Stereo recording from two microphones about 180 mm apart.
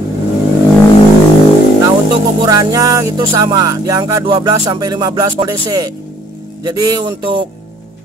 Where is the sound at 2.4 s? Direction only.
20° right (ahead or behind).